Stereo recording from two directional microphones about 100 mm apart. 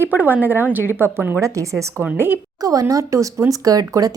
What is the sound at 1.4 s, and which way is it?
Speech, 30° right (ahead or behind).